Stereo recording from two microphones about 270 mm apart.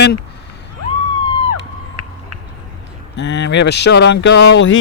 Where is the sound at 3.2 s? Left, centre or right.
Left.